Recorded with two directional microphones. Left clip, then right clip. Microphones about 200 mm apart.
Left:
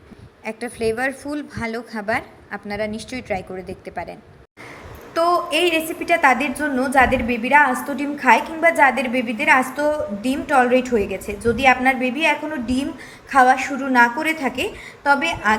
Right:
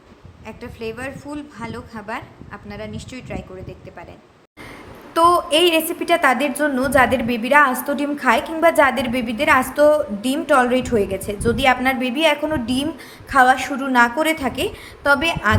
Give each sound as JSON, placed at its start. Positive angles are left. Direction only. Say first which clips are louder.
{"t": 0.4, "sound": "a woman's voice", "louder": "left 7 dB", "side_deg": 20}
{"t": 5.1, "sound": "a woman's voice", "louder": "right 3 dB", "side_deg": -25}